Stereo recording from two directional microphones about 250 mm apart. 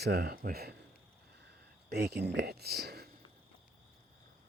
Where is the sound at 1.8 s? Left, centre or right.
Right.